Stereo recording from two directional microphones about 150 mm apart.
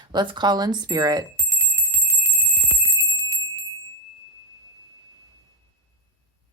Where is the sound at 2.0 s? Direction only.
15° right (ahead or behind).